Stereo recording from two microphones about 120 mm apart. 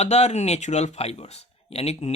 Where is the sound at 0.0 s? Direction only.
65° left (ahead or behind).